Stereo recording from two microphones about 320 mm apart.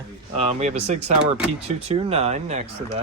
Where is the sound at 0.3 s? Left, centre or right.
Right.